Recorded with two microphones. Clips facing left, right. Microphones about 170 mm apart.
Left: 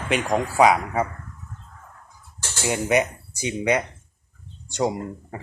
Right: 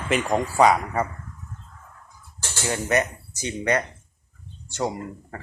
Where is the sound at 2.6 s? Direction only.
15° left (ahead or behind).